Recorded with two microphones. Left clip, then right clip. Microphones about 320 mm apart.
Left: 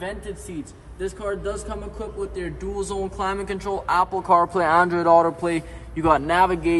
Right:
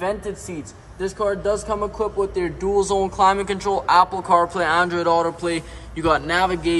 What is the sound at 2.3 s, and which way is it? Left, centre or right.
Speech, centre.